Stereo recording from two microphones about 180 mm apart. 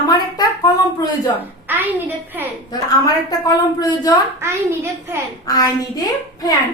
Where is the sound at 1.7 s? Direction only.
10° right (ahead or behind).